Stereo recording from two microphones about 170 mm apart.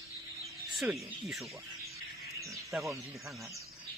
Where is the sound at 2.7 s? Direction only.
Centre (ahead or behind).